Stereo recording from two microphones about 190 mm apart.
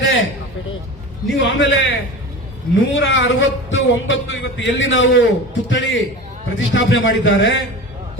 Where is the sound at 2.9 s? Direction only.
80° left.